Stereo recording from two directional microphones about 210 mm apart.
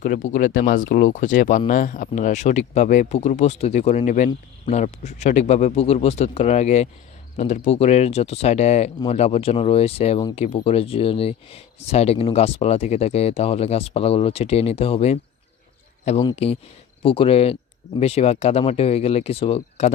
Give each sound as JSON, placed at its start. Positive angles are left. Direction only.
{"t": 0.0, "sound": "speech", "side_deg": 35}